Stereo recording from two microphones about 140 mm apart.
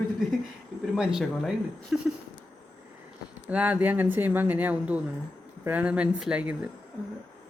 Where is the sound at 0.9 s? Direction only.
5° right (ahead or behind).